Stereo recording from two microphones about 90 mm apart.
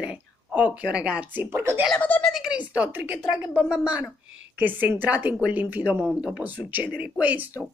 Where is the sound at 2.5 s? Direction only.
15° right (ahead or behind).